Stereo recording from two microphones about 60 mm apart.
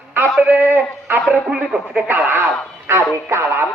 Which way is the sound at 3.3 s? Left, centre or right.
Right.